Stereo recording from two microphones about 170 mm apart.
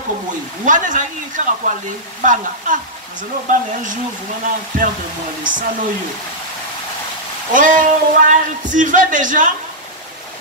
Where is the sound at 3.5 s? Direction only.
50° right (ahead or behind).